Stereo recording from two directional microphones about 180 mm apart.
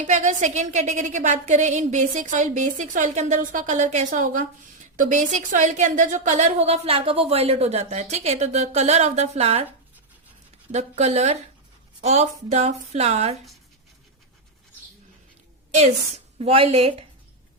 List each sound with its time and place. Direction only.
0.0 s a woman's voice: 45° right (ahead or behind)
10.7 s a woman's voice: 40° right (ahead or behind)
15.7 s a woman's voice: 35° right (ahead or behind)